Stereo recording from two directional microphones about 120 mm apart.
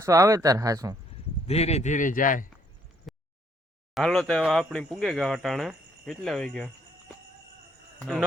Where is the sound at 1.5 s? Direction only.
65° left (ahead or behind); by 2.4 s 90° left.